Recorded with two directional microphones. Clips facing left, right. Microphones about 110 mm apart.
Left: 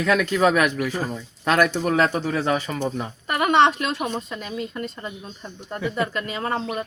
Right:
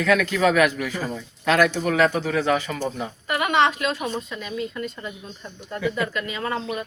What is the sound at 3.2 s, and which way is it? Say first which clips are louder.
Speech: left 3 dB; 35° left (ahead or behind).